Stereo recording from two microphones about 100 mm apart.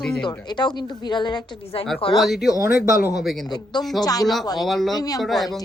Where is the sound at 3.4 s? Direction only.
45° left (ahead or behind).